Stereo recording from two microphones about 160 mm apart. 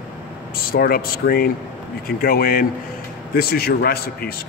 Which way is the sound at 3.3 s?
75° left (ahead or behind).